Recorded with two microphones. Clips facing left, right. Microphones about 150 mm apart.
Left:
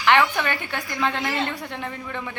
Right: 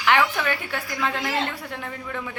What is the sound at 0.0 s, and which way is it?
A woman's voice, 5° right (ahead or behind).